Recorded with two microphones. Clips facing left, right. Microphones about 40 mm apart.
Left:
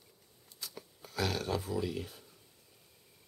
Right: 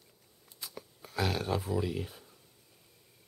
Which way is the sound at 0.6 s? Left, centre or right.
Centre.